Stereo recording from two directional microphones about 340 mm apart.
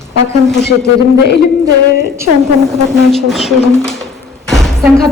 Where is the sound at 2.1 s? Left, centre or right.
Centre.